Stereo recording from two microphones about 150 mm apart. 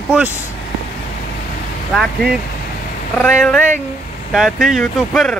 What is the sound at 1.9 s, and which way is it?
Speech, centre (ahead or behind).